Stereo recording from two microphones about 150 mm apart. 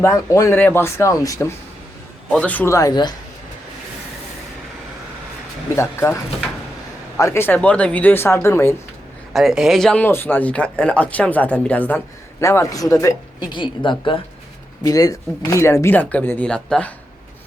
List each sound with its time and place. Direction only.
0.0 s speech: 20° left (ahead or behind)
2.3 s speech: 10° left (ahead or behind)
2.7 s speech: 25° left (ahead or behind)
5.7 s speech: 15° left (ahead or behind)
7.2 s speech: 15° left (ahead or behind)
9.3 s speech: centre (ahead or behind)